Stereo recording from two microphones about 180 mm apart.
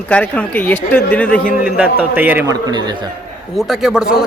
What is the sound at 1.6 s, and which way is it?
Speech, 10° right (ahead or behind).